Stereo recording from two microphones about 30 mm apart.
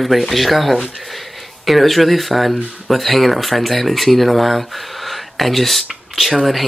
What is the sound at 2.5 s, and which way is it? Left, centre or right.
Speech, right.